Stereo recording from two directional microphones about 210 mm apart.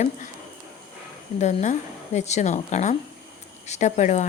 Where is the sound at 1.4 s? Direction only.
35° left (ahead or behind).